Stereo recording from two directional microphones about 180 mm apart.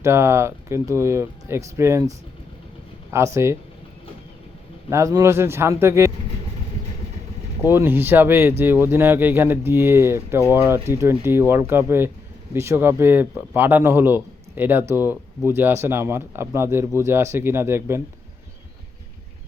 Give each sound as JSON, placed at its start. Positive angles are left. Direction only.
{"t": 0.0, "sound": "speech", "side_deg": -15}
{"t": 4.9, "sound": "speech", "side_deg": -15}
{"t": 7.7, "sound": "speech", "side_deg": -10}